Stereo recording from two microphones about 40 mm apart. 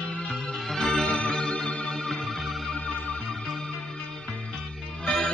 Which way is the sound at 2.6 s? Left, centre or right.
Left.